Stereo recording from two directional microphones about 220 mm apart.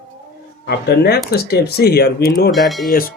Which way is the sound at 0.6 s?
45° left (ahead or behind).